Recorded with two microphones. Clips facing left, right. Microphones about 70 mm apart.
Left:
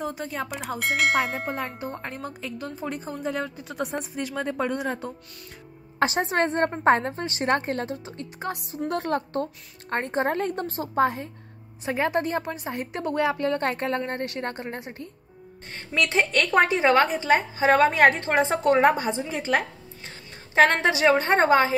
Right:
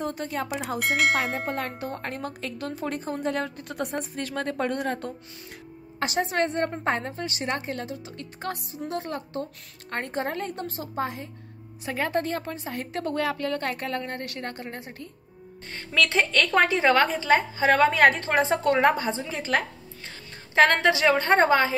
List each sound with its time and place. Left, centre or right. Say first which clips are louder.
0.0 s speech: right 1 dB; centre
5.9 s a woman's voice: left 2 dB; left
7.4 s a woman's voice: left 7 dB; left
8.7 s a woman's voice: left 9 dB; left
9.8 s a woman's voice: left 4 dB; left
11.8 s a woman's voice: left 2 dB; left